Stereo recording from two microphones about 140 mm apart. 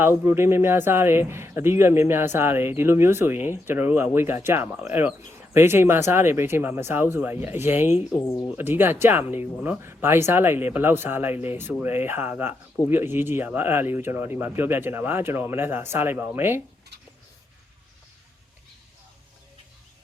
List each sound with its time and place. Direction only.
0.3 s speech: 20° right (ahead or behind)
8.2 s speech: 20° left (ahead or behind)
8.4 s speech: 15° right (ahead or behind)